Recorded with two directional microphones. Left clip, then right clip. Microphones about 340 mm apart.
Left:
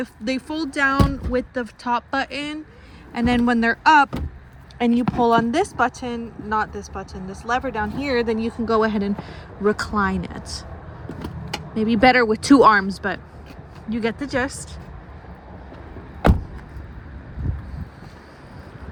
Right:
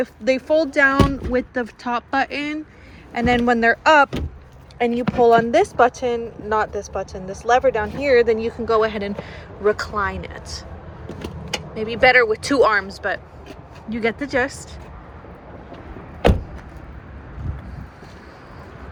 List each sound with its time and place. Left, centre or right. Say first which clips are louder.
0.0 s a woman's voice: right 7 dB; centre
11.7 s a woman's voice: right 1 dB; centre